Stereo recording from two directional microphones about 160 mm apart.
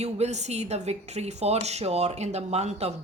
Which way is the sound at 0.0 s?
45° right (ahead or behind).